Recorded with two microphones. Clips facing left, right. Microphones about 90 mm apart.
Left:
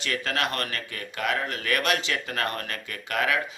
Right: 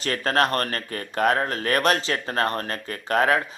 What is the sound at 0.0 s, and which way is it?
Speech, 40° right (ahead or behind).